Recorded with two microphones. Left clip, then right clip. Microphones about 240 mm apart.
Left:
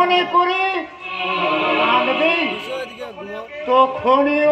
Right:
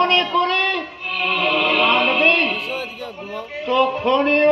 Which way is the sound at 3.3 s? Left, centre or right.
Left.